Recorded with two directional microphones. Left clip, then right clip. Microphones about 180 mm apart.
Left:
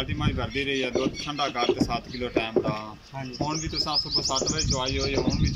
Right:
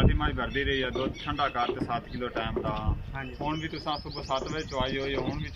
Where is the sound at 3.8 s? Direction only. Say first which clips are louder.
Left 10 dB; 5° left (ahead or behind).